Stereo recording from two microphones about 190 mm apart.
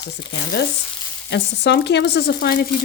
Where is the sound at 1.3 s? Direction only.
65° left (ahead or behind).